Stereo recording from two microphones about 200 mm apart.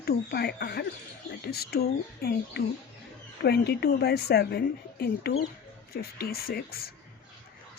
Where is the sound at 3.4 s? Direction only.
55° left (ahead or behind).